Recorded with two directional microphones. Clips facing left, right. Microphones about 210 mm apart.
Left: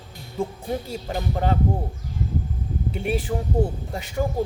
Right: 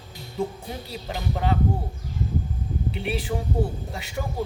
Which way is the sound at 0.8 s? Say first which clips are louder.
Left 3 dB; 45° left (ahead or behind).